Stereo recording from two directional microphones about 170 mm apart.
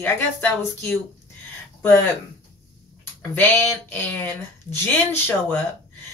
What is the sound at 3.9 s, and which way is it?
Speech, 10° left (ahead or behind).